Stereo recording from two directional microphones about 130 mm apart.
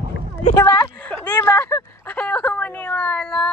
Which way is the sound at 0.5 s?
25° left (ahead or behind).